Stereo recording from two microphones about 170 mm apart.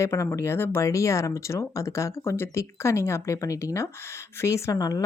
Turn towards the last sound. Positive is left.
turn(degrees=20)  # may be behind; listen again after turning